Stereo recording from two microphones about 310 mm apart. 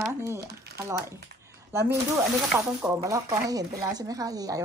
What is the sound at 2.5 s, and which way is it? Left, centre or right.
Speech, centre.